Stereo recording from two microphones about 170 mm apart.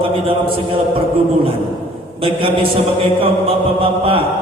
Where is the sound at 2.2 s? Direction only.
30° right (ahead or behind).